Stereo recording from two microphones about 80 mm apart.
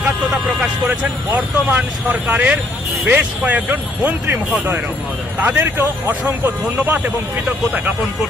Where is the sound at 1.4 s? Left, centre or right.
Centre.